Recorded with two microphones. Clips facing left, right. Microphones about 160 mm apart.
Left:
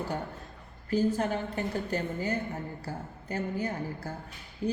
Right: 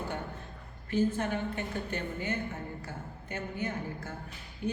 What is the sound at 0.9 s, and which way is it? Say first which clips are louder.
Speech: left 2 dB; 35° left (ahead or behind).